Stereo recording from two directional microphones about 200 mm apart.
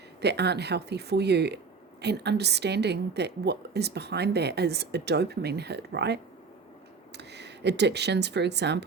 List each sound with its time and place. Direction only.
0.2 s a woman's voice: 55° right (ahead or behind)